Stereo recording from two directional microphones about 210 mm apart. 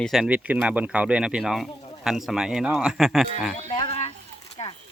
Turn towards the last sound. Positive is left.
turn(degrees=25)  # may be behind; listen again after turning